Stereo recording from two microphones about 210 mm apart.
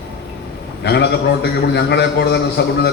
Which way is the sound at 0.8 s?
50° left (ahead or behind).